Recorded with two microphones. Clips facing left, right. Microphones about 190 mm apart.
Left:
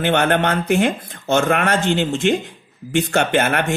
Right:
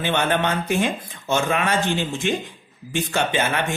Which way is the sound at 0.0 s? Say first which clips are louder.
Left 4 dB; 60° left (ahead or behind).